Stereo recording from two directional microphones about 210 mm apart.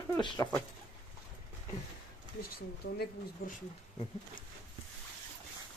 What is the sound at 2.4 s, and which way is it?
Speech, 45° left (ahead or behind).